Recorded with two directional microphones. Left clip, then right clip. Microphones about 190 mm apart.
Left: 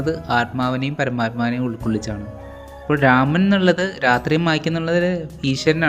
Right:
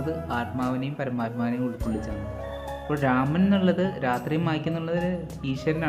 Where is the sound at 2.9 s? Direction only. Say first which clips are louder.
Left 9 dB; 20° left (ahead or behind).